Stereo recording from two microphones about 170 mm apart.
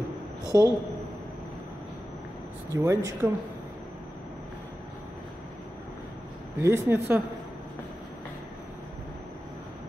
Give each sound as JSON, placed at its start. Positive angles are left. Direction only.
{"t": 0.5, "sound": "speech", "side_deg": -20}
{"t": 2.7, "sound": "speech", "side_deg": -20}
{"t": 6.6, "sound": "speech", "side_deg": -15}